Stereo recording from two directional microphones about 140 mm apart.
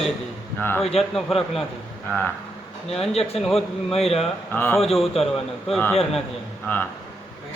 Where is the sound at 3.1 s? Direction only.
45° left (ahead or behind).